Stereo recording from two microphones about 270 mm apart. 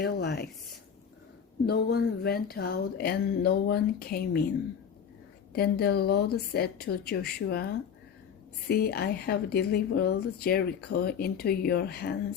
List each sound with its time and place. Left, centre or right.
0.0 s a woman's voice: left
5.5 s a woman's voice: left